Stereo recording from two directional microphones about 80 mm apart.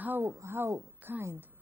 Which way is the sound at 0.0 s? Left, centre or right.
Right.